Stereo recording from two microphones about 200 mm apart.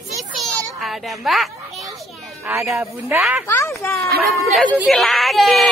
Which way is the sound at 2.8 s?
10° right (ahead or behind).